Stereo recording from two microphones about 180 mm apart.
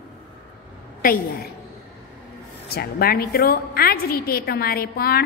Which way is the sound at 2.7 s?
60° left (ahead or behind).